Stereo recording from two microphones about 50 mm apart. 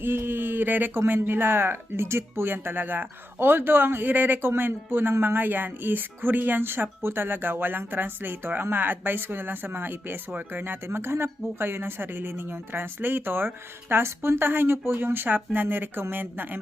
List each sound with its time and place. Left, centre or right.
0.0 s speech: right
13.9 s speech: right